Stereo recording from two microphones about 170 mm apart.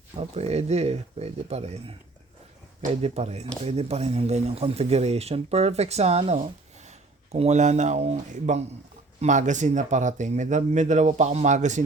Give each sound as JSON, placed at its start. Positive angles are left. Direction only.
{"t": 0.2, "sound": "speech", "side_deg": -40}
{"t": 3.0, "sound": "speech", "side_deg": -40}